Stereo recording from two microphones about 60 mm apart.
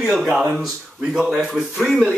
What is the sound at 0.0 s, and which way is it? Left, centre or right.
Speech, centre.